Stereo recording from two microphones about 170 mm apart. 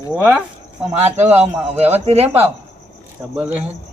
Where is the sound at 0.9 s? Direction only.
40° right (ahead or behind).